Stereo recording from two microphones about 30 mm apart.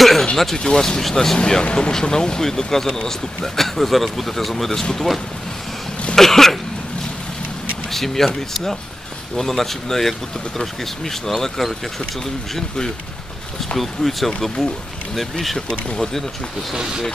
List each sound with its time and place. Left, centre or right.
0.0 s a sound: centre
0.6 s speech: left
1.6 s speech: left
1.9 s speech: left
7.9 s speech: centre
9.5 s speech: centre
13.7 s speech: centre
16.7 s speech: right